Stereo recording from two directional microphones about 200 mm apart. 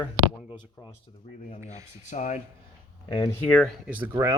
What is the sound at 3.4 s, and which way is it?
Speech, 5° left (ahead or behind).